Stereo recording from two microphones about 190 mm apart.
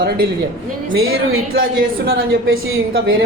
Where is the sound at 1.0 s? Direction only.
90° right.